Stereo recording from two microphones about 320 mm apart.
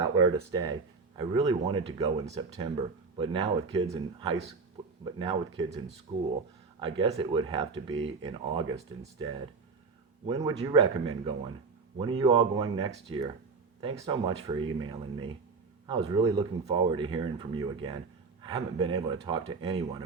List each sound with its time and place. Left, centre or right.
0.0 s speech: centre
6.7 s speech: centre